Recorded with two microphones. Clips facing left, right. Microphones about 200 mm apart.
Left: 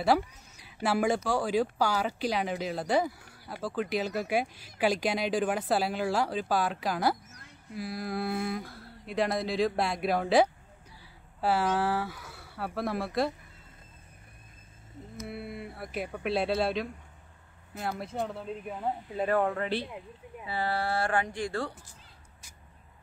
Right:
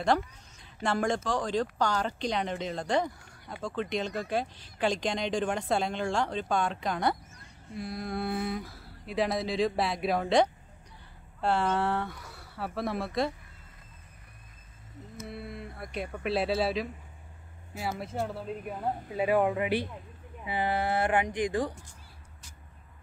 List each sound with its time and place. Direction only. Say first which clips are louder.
0.0 s speech: left 1 dB; 5° left (ahead or behind)
15.2 s speech: left 2 dB; 5° left (ahead or behind); by 21.8 s 15° right (ahead or behind)